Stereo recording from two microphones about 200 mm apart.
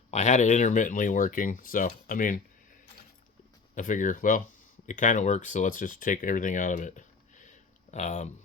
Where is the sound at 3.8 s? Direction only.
40° left (ahead or behind).